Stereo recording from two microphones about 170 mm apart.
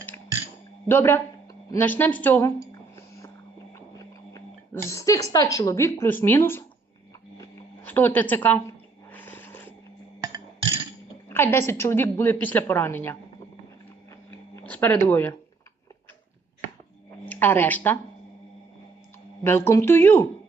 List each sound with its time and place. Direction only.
0.9 s a woman's voice: 15° left (ahead or behind)
1.7 s a sound: 10° left (ahead or behind)
3.9 s sneeze: 20° left (ahead or behind)
5.3 s a woman's voice: 20° left (ahead or behind)
7.3 s a sound: 15° left (ahead or behind)
11.3 s a woman's voice: 15° left (ahead or behind)
14.3 s a sound: 10° left (ahead or behind)
17.2 s speech: 10° left (ahead or behind)
19.5 s a woman's voice: 15° left (ahead or behind)